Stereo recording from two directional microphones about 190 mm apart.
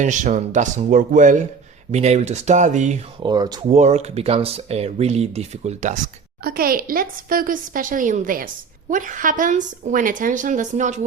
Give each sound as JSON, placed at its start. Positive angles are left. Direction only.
{"t": 0.0, "sound": "speech", "side_deg": -40}
{"t": 3.2, "sound": "speech", "side_deg": -20}
{"t": 3.7, "sound": "speech", "side_deg": -35}
{"t": 6.4, "sound": "a woman's voice", "side_deg": -50}